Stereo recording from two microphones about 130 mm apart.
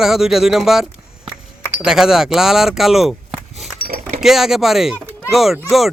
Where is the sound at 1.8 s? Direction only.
5° right (ahead or behind).